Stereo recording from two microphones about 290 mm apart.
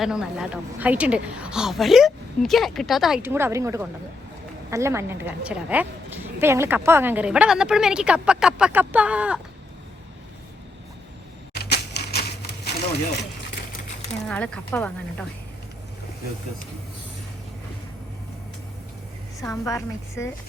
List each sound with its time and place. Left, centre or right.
0.0 s a woman's voice: centre
11.5 s typewriter: left
14.3 s a woman's voice: centre
19.4 s a woman's voice: centre